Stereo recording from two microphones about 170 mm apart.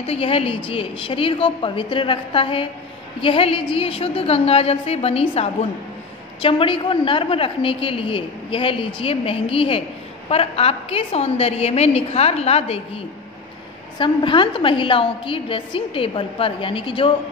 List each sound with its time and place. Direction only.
0.0 s a woman's voice: 35° left (ahead or behind)